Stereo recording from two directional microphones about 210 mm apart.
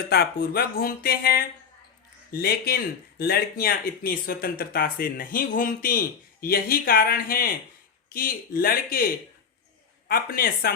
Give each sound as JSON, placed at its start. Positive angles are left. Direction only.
{"t": 0.1, "sound": "speech", "side_deg": 45}
{"t": 10.1, "sound": "speech", "side_deg": 45}